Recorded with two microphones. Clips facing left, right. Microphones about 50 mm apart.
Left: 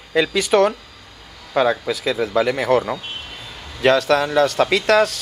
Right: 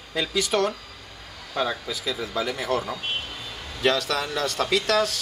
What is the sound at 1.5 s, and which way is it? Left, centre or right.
Speech, left.